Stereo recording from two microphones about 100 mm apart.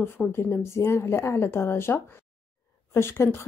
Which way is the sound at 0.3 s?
25° left (ahead or behind).